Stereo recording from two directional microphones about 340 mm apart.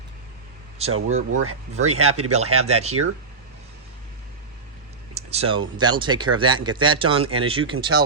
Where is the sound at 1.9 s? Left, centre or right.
Right.